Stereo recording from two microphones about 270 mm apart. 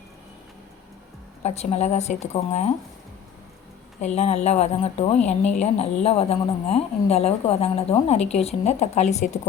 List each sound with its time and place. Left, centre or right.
1.5 s a woman's voice: left
4.0 s a woman's voice: left